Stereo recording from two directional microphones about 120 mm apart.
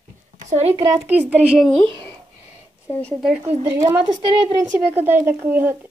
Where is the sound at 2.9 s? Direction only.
15° left (ahead or behind).